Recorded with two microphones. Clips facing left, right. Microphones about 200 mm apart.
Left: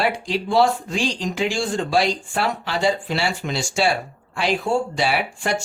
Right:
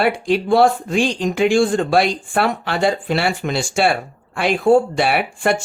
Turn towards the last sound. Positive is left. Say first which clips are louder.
# right 5 dB
turn(degrees=-55)  # may be behind; listen again after turning